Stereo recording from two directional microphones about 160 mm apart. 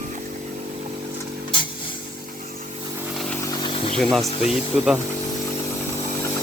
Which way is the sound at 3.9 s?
5° left (ahead or behind).